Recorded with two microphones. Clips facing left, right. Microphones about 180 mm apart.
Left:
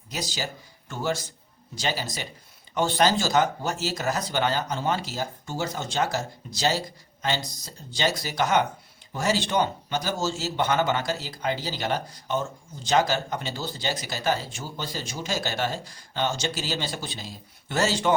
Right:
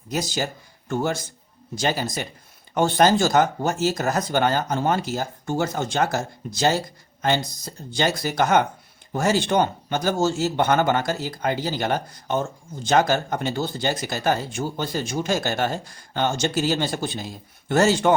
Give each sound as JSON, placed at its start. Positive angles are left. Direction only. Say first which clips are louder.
{"t": 0.1, "sound": "a man's voice", "louder": "right 6 dB", "side_deg": -50}